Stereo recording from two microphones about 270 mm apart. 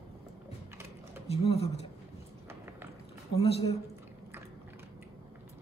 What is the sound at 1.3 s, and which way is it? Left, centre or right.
Speech, left.